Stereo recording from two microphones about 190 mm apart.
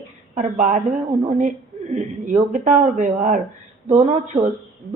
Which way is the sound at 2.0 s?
40° right (ahead or behind).